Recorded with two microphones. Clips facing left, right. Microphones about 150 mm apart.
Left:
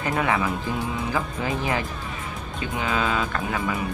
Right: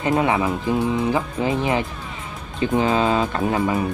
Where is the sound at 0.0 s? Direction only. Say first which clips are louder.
Right 4 dB; 25° right (ahead or behind).